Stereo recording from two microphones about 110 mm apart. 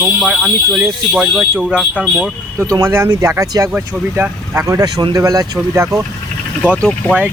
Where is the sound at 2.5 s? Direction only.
25° right (ahead or behind).